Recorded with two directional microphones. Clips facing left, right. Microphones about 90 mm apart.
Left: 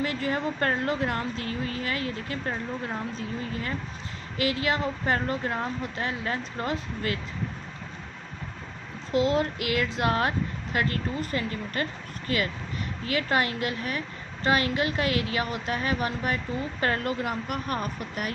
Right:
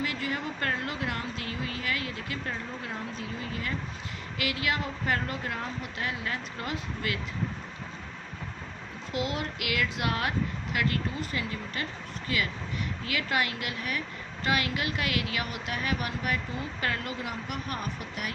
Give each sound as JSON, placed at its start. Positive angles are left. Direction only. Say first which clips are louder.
{"t": 0.0, "sound": "a woman's voice", "louder": "left 4 dB", "side_deg": 35}
{"t": 9.1, "sound": "a woman's voice", "louder": "left 8 dB", "side_deg": 35}